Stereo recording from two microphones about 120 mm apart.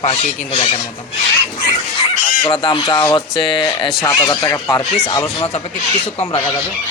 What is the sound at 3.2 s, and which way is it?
Filing, 40° left (ahead or behind).